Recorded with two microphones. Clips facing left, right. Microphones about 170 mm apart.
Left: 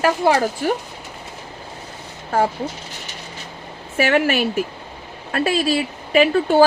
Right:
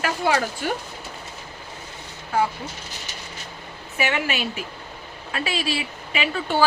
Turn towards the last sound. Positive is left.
turn(degrees=45)  # may be behind; listen again after turning